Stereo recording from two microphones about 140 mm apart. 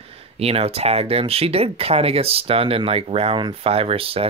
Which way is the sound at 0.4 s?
45° right (ahead or behind).